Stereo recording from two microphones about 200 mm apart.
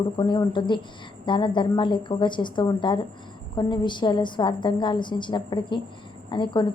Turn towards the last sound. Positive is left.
turn(degrees=25)  # may be behind; listen again after turning